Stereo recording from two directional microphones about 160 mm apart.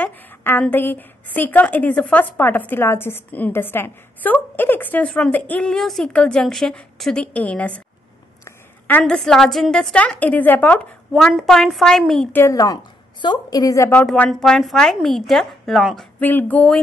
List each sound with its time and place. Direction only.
0.0 s a woman's voice: 10° left (ahead or behind)
12.4 s a woman's voice: 20° left (ahead or behind)
14.0 s a woman's voice: 5° left (ahead or behind)
16.2 s a woman's voice: 10° left (ahead or behind)